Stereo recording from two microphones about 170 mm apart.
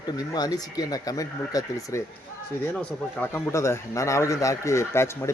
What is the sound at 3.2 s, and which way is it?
Speech, 15° left (ahead or behind).